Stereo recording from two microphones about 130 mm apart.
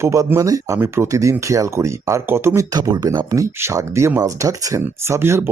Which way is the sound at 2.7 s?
30° right (ahead or behind).